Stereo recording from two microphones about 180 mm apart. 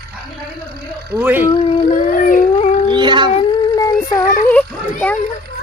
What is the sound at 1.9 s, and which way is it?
Howl, 45° left (ahead or behind).